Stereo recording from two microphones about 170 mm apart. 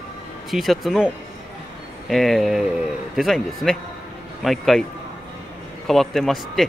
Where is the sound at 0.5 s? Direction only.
Centre (ahead or behind).